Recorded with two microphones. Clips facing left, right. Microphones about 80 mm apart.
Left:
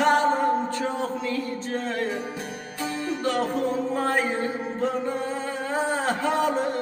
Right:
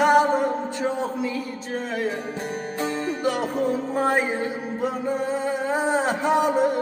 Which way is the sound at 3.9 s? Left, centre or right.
Centre.